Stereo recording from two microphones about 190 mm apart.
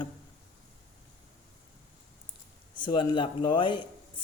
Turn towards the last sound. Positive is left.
turn(degrees=25)  # may be behind; listen again after turning